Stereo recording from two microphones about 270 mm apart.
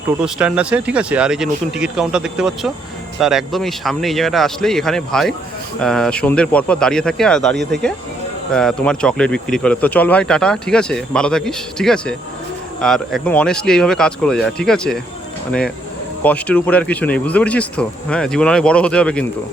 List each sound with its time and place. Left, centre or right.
0.3 s speech: centre
16.2 s speech: centre